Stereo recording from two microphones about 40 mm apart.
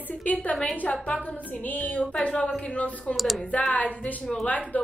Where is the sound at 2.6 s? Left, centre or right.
Left.